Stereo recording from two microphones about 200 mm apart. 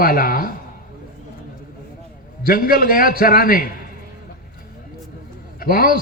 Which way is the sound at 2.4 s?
45° left (ahead or behind).